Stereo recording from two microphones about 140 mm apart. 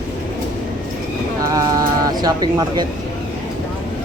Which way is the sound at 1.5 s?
25° right (ahead or behind).